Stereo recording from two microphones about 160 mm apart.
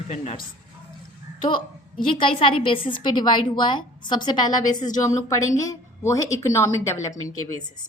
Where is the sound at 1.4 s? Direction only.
30° left (ahead or behind).